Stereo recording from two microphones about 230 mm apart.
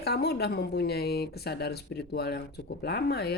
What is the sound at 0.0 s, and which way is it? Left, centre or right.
Speech, left.